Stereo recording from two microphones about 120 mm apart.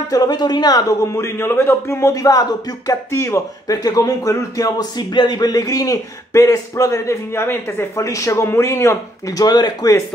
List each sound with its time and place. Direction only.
0.1 s speech: 35° left (ahead or behind)